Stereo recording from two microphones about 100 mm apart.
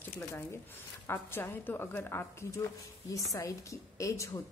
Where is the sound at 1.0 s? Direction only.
25° left (ahead or behind).